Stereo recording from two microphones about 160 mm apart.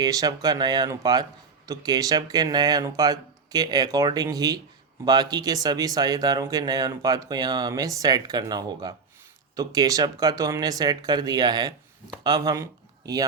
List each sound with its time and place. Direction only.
0.0 s speech: 25° right (ahead or behind)